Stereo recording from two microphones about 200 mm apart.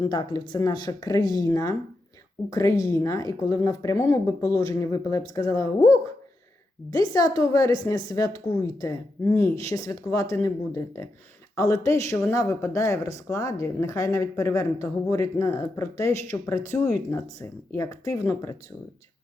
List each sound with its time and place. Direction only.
0.0 s speech: 20° left (ahead or behind)